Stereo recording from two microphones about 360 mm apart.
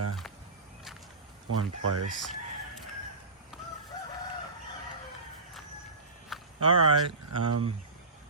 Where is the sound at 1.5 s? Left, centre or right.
Right.